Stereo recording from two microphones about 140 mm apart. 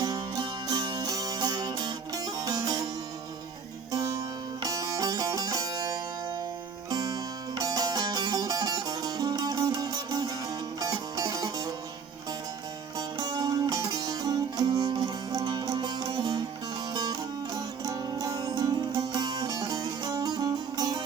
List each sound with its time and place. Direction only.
0.0 s music: 30° right (ahead or behind)
3.9 s music: 20° right (ahead or behind)
13.1 s music: 30° right (ahead or behind)